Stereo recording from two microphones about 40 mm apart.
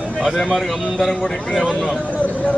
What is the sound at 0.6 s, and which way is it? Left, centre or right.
A man's voice, centre.